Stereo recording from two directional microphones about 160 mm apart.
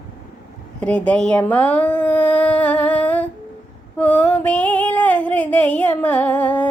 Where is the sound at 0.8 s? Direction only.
10° left (ahead or behind).